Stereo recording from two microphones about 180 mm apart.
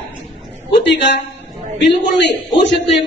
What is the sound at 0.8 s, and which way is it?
Speech, 75° left (ahead or behind).